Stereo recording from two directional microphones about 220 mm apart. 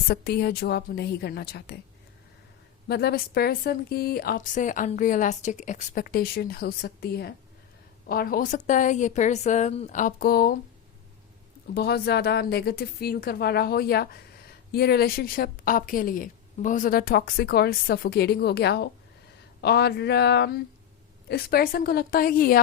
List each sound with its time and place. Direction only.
0.1 s speech: 45° left (ahead or behind)
2.8 s a woman's voice: 45° left (ahead or behind)
11.7 s a woman's voice: 45° left (ahead or behind)